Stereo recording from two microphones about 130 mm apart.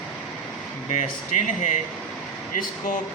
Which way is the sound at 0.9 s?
65° left (ahead or behind).